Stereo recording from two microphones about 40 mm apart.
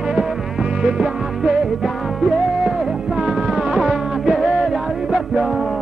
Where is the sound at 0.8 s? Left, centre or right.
Right.